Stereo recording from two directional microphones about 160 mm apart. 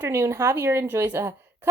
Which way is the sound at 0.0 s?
15° right (ahead or behind).